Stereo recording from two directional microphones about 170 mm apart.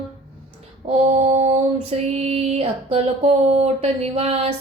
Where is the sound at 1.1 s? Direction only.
40° right (ahead or behind).